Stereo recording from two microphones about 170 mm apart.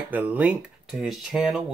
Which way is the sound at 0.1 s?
10° right (ahead or behind).